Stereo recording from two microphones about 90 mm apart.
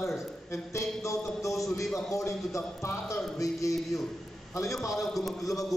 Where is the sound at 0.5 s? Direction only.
35° left (ahead or behind).